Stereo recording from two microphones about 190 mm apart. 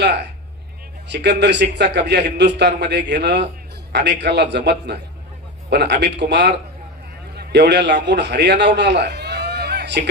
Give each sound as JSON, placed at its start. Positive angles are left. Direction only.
{"t": 0.0, "sound": "a man's voice", "side_deg": -65}